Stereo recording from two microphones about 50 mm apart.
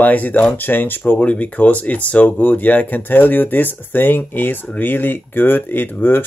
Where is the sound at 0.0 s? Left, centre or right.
Left.